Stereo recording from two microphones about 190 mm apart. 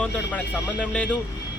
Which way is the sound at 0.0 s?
5° left (ahead or behind).